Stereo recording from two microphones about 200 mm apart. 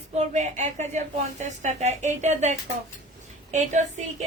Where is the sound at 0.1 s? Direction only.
35° right (ahead or behind).